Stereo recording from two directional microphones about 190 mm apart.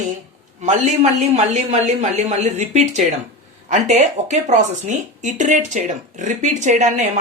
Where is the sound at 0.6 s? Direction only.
35° right (ahead or behind).